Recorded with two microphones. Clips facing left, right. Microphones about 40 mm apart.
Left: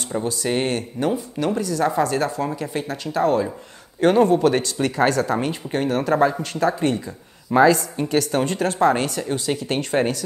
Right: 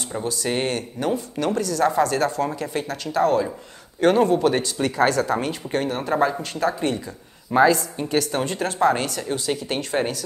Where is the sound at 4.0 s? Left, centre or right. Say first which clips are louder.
Left 1 dB; right.